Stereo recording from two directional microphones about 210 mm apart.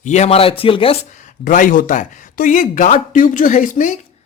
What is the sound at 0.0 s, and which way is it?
Speech, 30° left (ahead or behind).